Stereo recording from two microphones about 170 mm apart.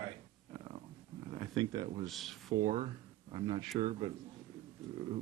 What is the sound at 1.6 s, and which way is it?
Speech, 30° right (ahead or behind).